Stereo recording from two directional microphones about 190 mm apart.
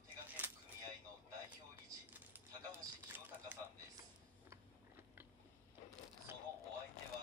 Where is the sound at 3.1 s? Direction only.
10° right (ahead or behind).